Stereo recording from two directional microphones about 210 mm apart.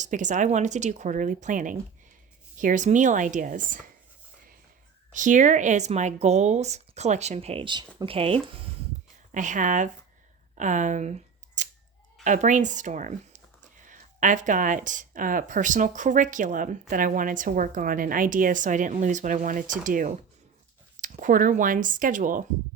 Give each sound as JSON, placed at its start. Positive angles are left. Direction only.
{"t": 0.0, "sound": "a woman's voice", "side_deg": -35}
{"t": 5.1, "sound": "a woman's voice", "side_deg": -35}
{"t": 9.3, "sound": "a woman's voice", "side_deg": -35}
{"t": 10.5, "sound": "a sound", "side_deg": -35}
{"t": 12.2, "sound": "a woman's voice", "side_deg": -35}